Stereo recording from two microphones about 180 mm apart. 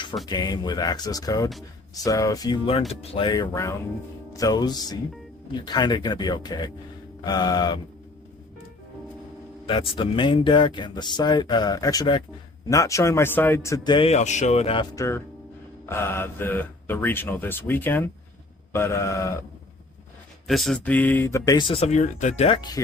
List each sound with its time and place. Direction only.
0.3 s speech: 20° left (ahead or behind)
9.6 s speech: 30° left (ahead or behind)
14.9 s speech: 15° left (ahead or behind)
20.5 s speech: centre (ahead or behind); by 22.8 s 25° left (ahead or behind)